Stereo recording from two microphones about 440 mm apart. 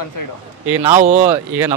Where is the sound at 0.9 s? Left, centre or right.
Centre.